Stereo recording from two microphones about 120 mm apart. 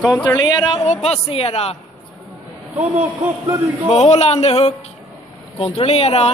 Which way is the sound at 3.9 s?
65° left (ahead or behind).